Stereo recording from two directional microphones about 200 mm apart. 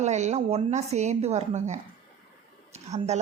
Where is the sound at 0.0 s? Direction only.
35° right (ahead or behind).